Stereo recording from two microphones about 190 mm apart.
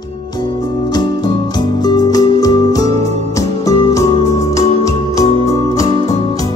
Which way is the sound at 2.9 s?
35° right (ahead or behind).